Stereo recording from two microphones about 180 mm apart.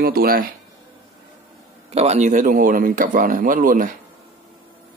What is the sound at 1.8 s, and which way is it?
Speech, 35° right (ahead or behind).